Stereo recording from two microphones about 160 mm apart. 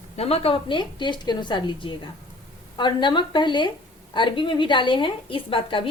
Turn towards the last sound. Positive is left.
turn(degrees=30)  # may be behind; listen again after turning